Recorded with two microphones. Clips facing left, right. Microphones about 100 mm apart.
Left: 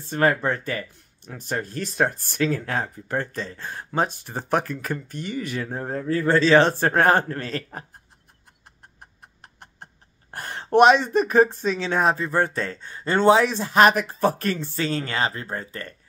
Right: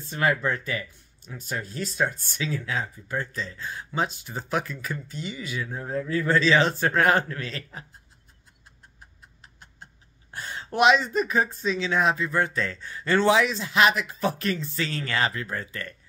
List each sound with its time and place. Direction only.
0.0 s speech: 45° left (ahead or behind)
5.7 s speech: 45° left (ahead or behind)
8.6 s chicken: 55° left (ahead or behind)
10.3 s a sound: 55° left (ahead or behind)
10.7 s speech: 45° left (ahead or behind)